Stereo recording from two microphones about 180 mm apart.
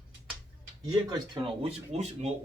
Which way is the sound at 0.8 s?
20° right (ahead or behind).